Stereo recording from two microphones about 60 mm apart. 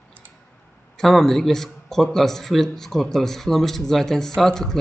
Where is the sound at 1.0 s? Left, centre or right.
Centre.